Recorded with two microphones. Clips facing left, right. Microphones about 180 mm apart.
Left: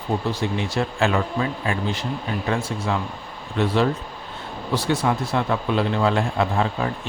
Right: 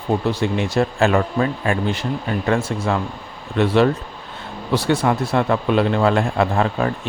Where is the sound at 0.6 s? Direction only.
50° right (ahead or behind).